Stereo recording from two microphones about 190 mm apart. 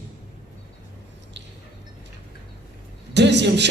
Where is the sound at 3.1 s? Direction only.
65° right (ahead or behind).